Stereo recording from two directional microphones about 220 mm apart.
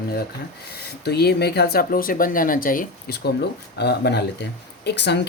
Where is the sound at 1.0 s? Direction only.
45° left (ahead or behind).